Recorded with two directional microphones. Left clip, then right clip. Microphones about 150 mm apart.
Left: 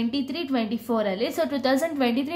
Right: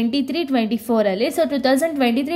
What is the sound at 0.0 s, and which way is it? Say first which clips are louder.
A woman's voice: right 7 dB; 30° right (ahead or behind).